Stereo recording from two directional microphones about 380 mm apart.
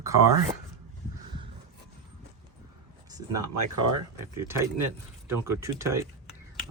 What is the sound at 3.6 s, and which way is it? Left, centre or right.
Speech, right.